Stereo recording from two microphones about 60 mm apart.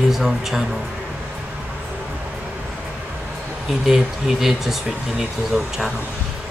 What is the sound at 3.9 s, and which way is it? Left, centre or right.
Speech, centre.